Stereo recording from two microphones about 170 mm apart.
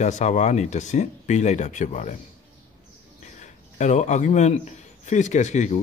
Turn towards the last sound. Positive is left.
turn(degrees=45)  # may be behind; listen again after turning